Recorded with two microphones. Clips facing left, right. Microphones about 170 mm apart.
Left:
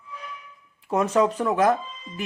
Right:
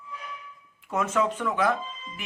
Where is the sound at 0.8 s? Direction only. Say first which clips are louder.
Left 5 dB; 35° left (ahead or behind).